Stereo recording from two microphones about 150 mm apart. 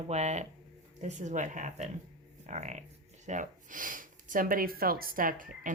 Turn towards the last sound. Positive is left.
turn(degrees=-60)  # may be behind; listen again after turning